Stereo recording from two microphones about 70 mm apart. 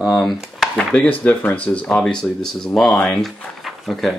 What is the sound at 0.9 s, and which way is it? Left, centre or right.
Speech, left.